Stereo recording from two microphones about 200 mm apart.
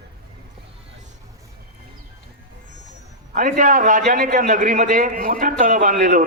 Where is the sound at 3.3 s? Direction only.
40° right (ahead or behind).